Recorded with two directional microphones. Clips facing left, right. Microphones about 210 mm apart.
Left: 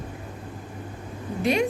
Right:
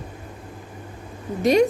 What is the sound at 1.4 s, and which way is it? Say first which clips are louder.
Speech: right 6 dB; 40° right (ahead or behind).